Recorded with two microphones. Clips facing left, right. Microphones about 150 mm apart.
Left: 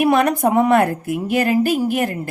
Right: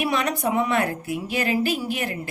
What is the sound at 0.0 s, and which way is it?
A woman's voice, 50° left (ahead or behind).